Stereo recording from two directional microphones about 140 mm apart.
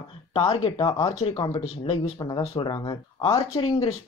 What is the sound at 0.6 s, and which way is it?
Speech, 35° left (ahead or behind).